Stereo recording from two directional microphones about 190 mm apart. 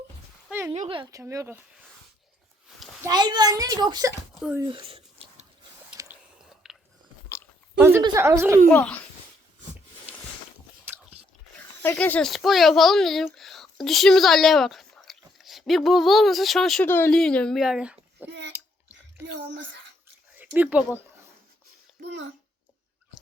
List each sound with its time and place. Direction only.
0.7 s speech: 30° right (ahead or behind); by 1.8 s 10° right (ahead or behind)
3.0 s a child's voice: 20° right (ahead or behind)
4.4 s speech: 10° right (ahead or behind)
4.7 s a sound: 30° right (ahead or behind)
6.0 s squish: 20° right (ahead or behind)
6.5 s biting: centre (ahead or behind)
7.8 s speech: 10° right (ahead or behind)
8.7 s speech: 10° left (ahead or behind)
10.9 s biting: 5° right (ahead or behind)
11.8 s speech: 10° left (ahead or behind); by 18.3 s 5° right (ahead or behind)
18.3 s a child's voice: 65° right (ahead or behind)
18.5 s a sound: 10° right (ahead or behind)
20.3 s speech: 10° right (ahead or behind)